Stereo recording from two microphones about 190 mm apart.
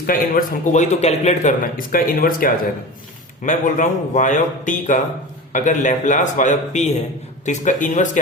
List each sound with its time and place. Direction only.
0.0 s a man's voice: 50° left (ahead or behind)